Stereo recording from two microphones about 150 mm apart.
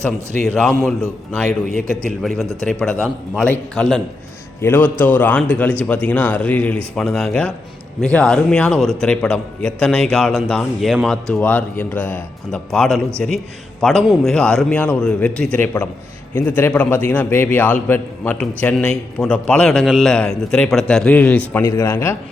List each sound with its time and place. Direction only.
0.4 s speech: 5° left (ahead or behind)
2.6 s speech: 5° left (ahead or behind)
4.6 s a man's voice: 15° left (ahead or behind)
21.6 s speech: 20° left (ahead or behind)